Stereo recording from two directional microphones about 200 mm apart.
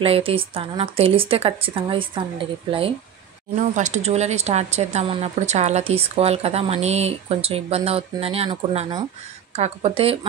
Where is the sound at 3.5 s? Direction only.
40° right (ahead or behind).